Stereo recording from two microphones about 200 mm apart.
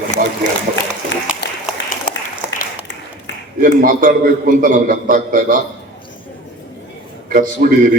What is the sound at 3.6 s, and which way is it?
A man's voice, 45° right (ahead or behind).